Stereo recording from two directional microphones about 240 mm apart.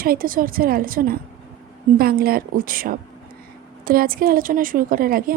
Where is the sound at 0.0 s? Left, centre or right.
Right.